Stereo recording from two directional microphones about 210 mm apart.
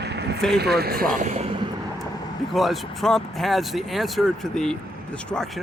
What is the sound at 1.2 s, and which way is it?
Speech, 35° right (ahead or behind).